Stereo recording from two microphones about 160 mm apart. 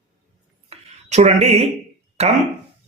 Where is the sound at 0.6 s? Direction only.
45° right (ahead or behind).